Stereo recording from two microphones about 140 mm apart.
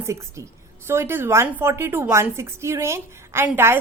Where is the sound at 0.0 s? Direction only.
20° right (ahead or behind).